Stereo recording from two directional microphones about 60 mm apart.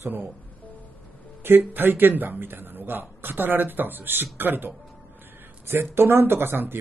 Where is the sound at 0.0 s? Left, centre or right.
Right.